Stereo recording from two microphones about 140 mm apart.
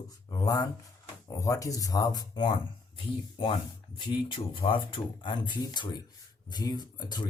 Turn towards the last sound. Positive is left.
turn(degrees=30)  # may be behind; listen again after turning